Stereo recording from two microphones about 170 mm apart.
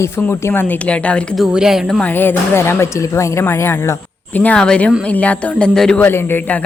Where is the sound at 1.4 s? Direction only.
5° right (ahead or behind).